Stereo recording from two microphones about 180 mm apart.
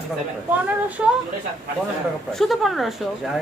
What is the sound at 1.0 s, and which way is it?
Speech, 5° right (ahead or behind).